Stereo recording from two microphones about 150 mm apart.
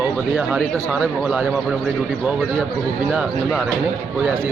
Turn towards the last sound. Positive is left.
turn(degrees=-5)  # may be behind; listen again after turning